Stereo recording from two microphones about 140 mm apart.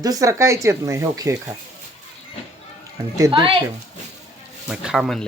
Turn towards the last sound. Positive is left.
turn(degrees=0)  # may be behind; listen again after turning